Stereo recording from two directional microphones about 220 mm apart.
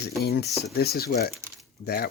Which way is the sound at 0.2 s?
45° left (ahead or behind).